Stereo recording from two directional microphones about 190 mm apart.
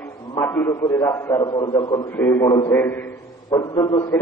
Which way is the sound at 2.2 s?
10° left (ahead or behind).